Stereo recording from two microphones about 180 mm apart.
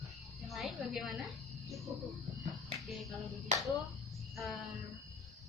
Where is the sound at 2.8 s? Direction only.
Centre (ahead or behind).